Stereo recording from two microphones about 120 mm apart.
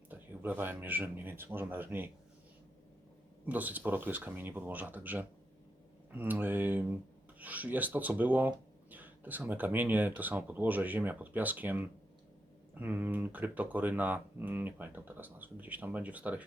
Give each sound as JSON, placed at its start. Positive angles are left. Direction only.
{"t": 0.1, "sound": "speech", "side_deg": -15}
{"t": 3.4, "sound": "speech", "side_deg": -15}